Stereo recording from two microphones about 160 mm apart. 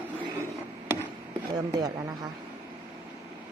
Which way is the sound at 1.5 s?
25° right (ahead or behind).